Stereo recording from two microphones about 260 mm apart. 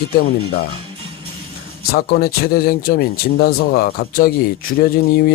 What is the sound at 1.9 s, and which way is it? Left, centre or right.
Speech, left.